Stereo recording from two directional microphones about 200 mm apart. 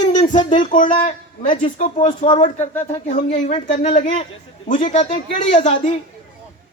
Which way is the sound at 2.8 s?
35° left (ahead or behind).